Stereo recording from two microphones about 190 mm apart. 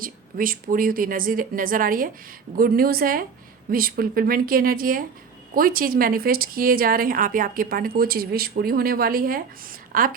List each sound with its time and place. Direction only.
0.0 s a woman's voice: 50° right (ahead or behind)